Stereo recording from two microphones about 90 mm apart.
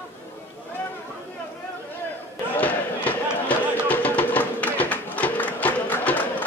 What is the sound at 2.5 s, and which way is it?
Music, 15° left (ahead or behind).